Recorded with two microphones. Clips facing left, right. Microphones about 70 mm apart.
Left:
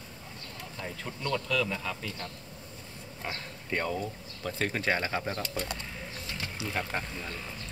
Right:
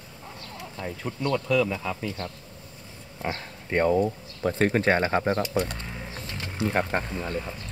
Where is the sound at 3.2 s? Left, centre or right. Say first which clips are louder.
Right 7 dB; right.